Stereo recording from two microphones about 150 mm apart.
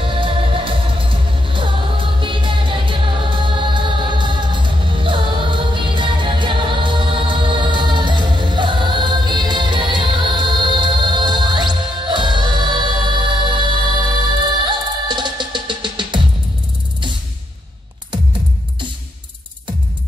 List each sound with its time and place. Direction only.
0.0 s music: 35° right (ahead or behind)